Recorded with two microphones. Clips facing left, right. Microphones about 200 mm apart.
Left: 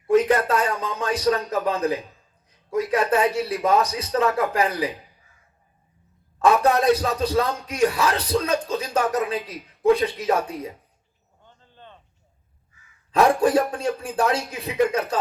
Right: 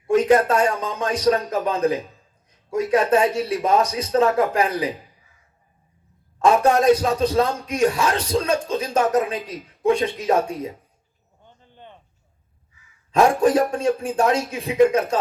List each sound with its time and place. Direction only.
0.1 s a man's voice: 30° right (ahead or behind)
6.4 s a man's voice: 30° right (ahead or behind)
11.4 s a sound: 15° right (ahead or behind)
12.7 s crow: 50° left (ahead or behind)
13.7 s a man's voice: 30° right (ahead or behind)